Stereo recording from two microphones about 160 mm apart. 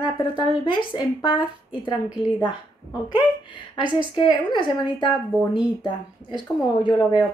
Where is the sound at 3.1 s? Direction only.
30° left (ahead or behind).